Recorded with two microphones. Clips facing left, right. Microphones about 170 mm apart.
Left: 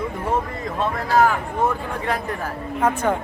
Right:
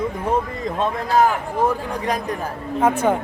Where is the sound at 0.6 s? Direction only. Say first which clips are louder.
Right 2 dB; 20° right (ahead or behind).